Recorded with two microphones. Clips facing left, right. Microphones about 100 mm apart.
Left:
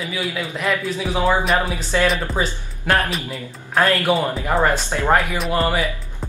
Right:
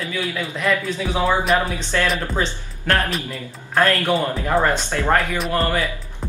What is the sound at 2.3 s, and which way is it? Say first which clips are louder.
Speech: even; 10° left (ahead or behind).